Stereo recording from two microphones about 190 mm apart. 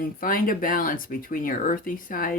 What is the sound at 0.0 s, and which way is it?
Speech, 50° left (ahead or behind).